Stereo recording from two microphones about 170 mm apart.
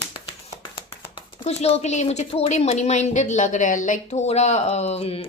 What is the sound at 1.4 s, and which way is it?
A woman's voice, 35° left (ahead or behind).